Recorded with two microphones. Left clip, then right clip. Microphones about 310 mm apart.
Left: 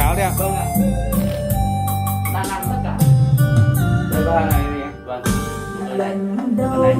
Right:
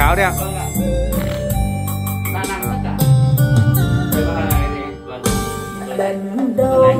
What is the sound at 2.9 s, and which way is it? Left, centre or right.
Music, right.